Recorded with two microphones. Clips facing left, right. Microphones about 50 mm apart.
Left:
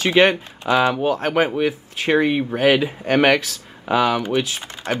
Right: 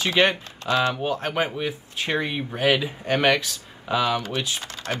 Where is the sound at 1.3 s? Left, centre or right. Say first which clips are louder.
Left 7 dB; left.